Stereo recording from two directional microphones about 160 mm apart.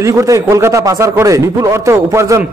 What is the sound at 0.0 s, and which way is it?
A man's voice, 20° right (ahead or behind).